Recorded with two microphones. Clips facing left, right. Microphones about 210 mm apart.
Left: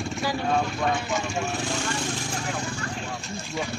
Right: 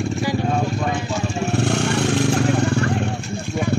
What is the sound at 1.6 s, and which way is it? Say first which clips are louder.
Vehicle: right 9 dB; 70° right (ahead or behind).